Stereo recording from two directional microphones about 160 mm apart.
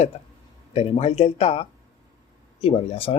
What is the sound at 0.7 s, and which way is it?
Speech, 40° left (ahead or behind).